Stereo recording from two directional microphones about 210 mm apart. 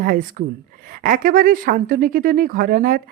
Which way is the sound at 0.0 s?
40° right (ahead or behind).